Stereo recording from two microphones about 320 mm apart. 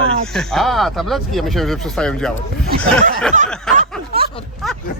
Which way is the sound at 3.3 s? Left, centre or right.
Right.